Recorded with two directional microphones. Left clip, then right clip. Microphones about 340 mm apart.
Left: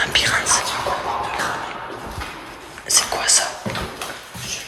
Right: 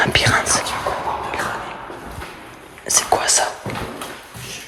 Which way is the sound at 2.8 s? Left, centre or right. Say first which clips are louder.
Right 2 dB; centre.